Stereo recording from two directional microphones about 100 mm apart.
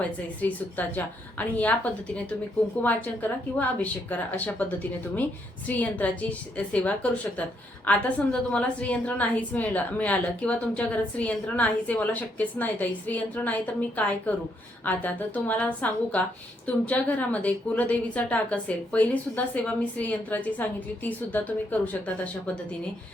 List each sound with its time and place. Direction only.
0.4 s a woman's voice: 15° left (ahead or behind)